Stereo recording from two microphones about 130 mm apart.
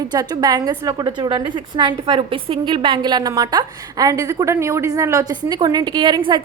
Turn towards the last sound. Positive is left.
turn(degrees=-35)  # may be behind; listen again after turning